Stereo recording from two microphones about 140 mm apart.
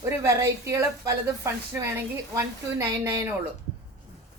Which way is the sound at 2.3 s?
20° right (ahead or behind).